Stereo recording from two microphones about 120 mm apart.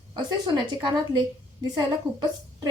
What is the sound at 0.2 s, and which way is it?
A woman's voice, 35° right (ahead or behind).